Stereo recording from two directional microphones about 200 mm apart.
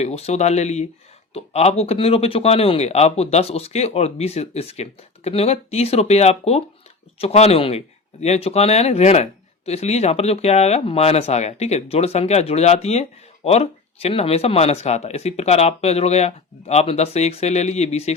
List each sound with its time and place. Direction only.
0.0 s speech: 30° left (ahead or behind)